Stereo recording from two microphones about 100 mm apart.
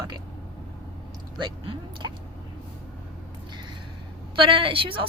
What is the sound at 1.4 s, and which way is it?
Speech, 50° right (ahead or behind).